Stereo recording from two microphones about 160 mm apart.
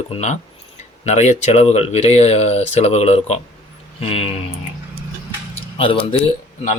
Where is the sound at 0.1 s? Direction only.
45° left (ahead or behind).